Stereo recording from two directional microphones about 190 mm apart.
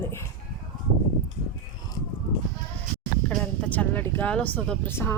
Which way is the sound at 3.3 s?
5° left (ahead or behind).